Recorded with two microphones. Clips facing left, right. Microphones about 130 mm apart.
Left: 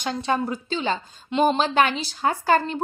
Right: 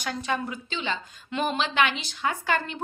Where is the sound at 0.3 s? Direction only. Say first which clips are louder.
Left 7 dB; 35° left (ahead or behind).